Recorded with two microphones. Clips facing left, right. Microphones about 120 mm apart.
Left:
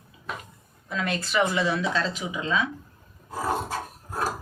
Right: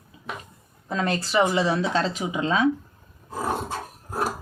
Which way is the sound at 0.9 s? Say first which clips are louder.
Right 3 dB; 35° right (ahead or behind).